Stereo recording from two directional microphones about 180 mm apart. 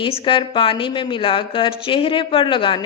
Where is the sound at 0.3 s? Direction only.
30° left (ahead or behind).